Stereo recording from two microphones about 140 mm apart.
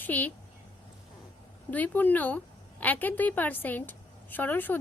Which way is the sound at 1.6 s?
10° left (ahead or behind).